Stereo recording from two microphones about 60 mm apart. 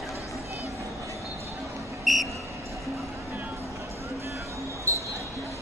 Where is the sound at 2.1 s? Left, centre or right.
Centre.